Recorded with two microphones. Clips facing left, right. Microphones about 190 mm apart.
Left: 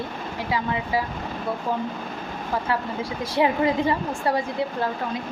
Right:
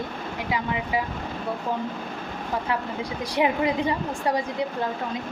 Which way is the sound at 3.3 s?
15° right (ahead or behind).